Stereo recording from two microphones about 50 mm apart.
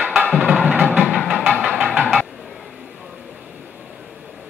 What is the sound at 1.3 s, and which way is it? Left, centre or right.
Music, centre.